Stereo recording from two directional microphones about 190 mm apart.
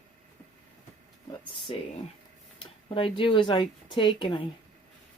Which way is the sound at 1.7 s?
30° left (ahead or behind).